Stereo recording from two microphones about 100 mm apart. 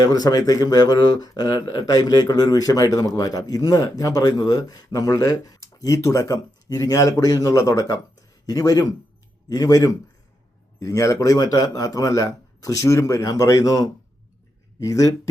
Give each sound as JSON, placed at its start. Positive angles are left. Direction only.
{"t": 0.0, "sound": "speech", "side_deg": 40}